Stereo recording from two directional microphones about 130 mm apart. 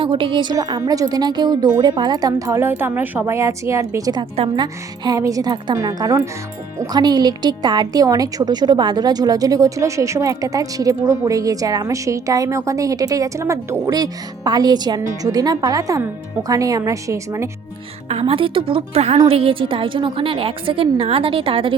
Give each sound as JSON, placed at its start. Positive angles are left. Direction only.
{"t": 0.0, "sound": "a woman's voice", "side_deg": -40}
{"t": 18.1, "sound": "a woman's voice", "side_deg": -45}